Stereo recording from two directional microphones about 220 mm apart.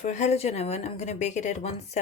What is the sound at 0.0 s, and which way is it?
Speech, 30° left (ahead or behind).